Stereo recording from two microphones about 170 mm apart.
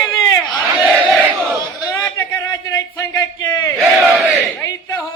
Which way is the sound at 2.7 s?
15° left (ahead or behind).